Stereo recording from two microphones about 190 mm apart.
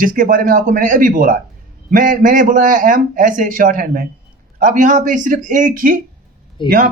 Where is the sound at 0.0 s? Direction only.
45° right (ahead or behind).